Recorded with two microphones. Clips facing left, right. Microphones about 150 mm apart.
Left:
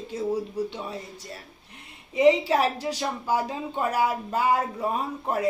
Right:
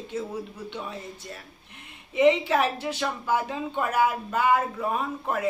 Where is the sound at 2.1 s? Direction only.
35° left (ahead or behind).